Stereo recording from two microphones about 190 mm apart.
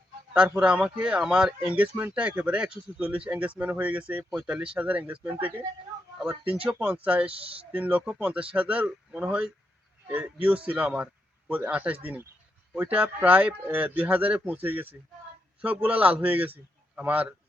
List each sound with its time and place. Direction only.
0.3 s speech: 5° right (ahead or behind)
7.3 s speech: 30° right (ahead or behind)
7.7 s a man's voice: 10° right (ahead or behind)